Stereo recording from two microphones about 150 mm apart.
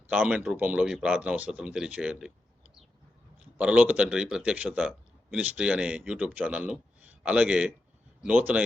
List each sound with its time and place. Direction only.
0.1 s a man's voice: 10° right (ahead or behind)
3.6 s a man's voice: 10° right (ahead or behind)